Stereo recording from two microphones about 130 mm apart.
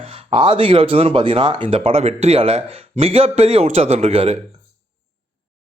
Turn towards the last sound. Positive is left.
turn(degrees=-50)  # may be behind; listen again after turning